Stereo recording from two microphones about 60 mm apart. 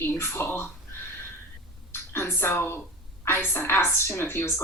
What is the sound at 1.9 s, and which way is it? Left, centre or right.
A woman's voice, left.